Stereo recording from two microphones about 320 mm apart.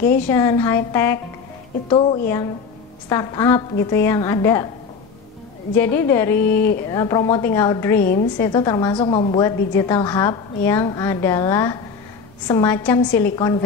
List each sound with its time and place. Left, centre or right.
0.3 s a woman's voice: centre
5.8 s a woman's voice: centre
8.0 s a woman's voice: left
8.4 s a woman's voice: centre